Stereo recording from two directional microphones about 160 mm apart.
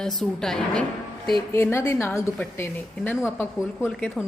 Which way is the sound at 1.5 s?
15° left (ahead or behind).